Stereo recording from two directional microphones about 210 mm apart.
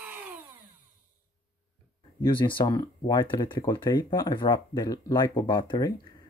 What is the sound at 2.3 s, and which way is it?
Speech, 25° left (ahead or behind).